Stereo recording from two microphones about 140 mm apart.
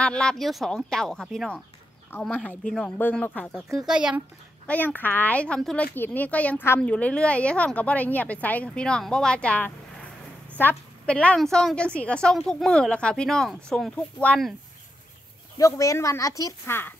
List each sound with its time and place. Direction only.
0.0 s a woman's voice: 5° left (ahead or behind)
3.7 s a woman's voice: 5° right (ahead or behind)
4.6 s a woman's voice: 10° left (ahead or behind)
15.5 s speech: 25° left (ahead or behind)